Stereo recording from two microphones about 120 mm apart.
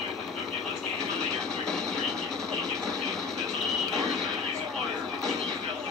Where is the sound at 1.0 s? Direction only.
5° left (ahead or behind).